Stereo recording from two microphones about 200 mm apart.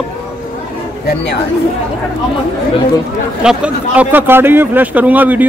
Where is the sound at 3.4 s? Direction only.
5° right (ahead or behind).